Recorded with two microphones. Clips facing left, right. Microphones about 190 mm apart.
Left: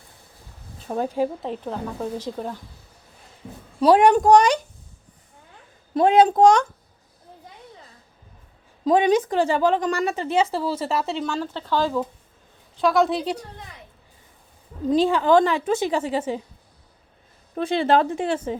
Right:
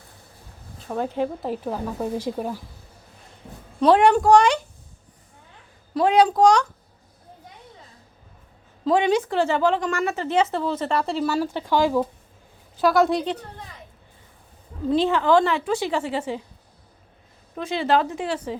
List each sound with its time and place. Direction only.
0.9 s a woman's voice: 15° left (ahead or behind)
1.4 s speech: 5° right (ahead or behind)
3.8 s a woman's voice: 10° left (ahead or behind)
6.0 s a woman's voice: 20° left (ahead or behind)
8.8 s a woman's voice: 15° left (ahead or behind); by 12.0 s 15° right (ahead or behind)
12.7 s speech: centre (ahead or behind)
14.8 s a woman's voice: 15° left (ahead or behind)
17.5 s a woman's voice: 30° left (ahead or behind)